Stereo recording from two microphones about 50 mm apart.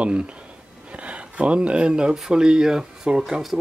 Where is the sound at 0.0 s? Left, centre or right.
Right.